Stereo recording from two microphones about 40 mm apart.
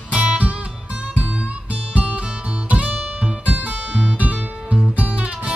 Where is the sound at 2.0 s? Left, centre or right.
Right.